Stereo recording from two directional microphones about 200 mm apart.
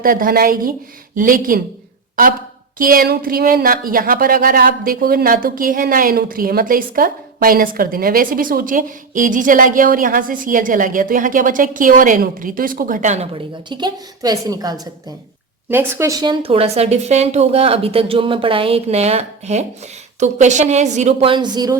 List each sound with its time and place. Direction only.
0.0 s speech: 45° right (ahead or behind)
2.7 s a woman's voice: 45° right (ahead or behind); by 21.8 s 20° right (ahead or behind)